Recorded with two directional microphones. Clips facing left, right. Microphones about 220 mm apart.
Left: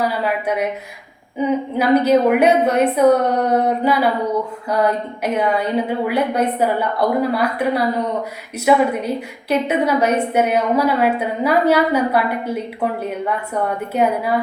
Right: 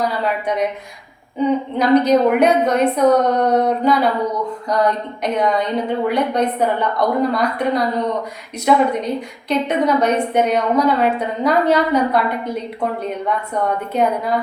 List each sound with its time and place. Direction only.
0.0 s a woman's voice: 5° left (ahead or behind)